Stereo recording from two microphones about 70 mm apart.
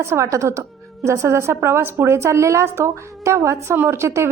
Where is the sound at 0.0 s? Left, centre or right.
Right.